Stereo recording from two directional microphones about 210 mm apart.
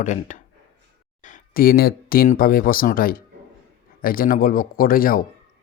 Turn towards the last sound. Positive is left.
turn(degrees=45)  # may be behind; listen again after turning